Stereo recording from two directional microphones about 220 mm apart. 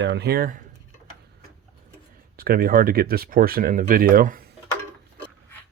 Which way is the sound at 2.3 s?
45° right (ahead or behind).